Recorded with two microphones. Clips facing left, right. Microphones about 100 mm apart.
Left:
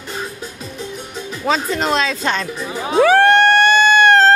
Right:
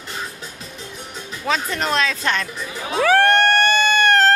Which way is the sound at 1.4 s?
20° left (ahead or behind).